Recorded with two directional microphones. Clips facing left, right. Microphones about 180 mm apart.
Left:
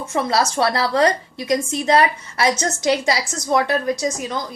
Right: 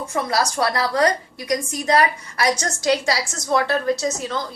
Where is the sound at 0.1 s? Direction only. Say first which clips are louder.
Left 3 dB; 25° left (ahead or behind).